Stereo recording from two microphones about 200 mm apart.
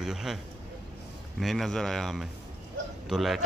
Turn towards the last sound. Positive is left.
turn(degrees=0)  # may be behind; listen again after turning